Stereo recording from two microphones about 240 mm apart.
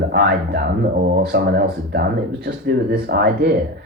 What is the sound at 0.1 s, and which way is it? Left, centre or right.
A woman's voice, right.